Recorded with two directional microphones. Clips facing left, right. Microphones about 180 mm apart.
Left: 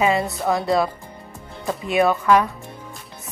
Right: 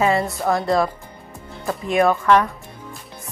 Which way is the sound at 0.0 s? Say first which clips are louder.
Right 1 dB; 20° left (ahead or behind).